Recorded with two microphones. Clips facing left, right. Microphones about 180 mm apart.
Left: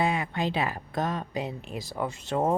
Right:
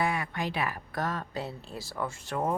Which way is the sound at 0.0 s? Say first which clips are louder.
Left 3 dB; 20° left (ahead or behind).